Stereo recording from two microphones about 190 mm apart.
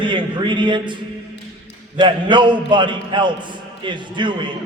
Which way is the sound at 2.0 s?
25° right (ahead or behind).